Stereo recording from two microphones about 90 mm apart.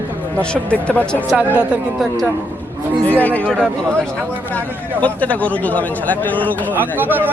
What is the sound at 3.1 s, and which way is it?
Speech, 20° left (ahead or behind).